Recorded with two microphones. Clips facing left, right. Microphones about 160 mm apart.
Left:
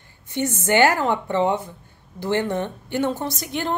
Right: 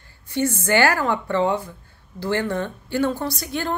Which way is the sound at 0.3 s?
20° left (ahead or behind).